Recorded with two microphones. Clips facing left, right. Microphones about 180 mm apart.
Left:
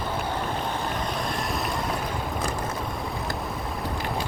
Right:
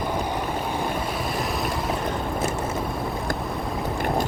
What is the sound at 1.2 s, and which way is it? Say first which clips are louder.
Vehicle: right 2 dB; centre (ahead or behind).